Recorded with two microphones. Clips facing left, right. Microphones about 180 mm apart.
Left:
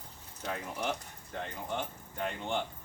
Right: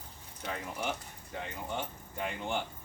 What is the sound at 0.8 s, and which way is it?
Speech, 5° right (ahead or behind).